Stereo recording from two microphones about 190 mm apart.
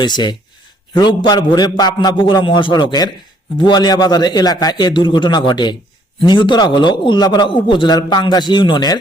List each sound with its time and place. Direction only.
0.0 s a man's voice: 25° left (ahead or behind)